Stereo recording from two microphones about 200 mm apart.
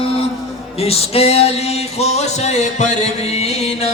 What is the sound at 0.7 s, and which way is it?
Music, 30° left (ahead or behind).